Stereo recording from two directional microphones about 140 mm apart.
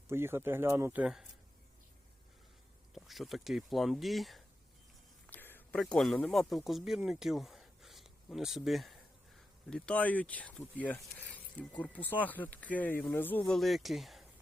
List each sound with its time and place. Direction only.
0.1 s speech: 15° right (ahead or behind)
1.0 s speech: 5° right (ahead or behind)
2.9 s speech: centre (ahead or behind)
5.2 s a sound: 15° left (ahead or behind)
5.8 s speech: 5° left (ahead or behind)
13.6 s speech: centre (ahead or behind)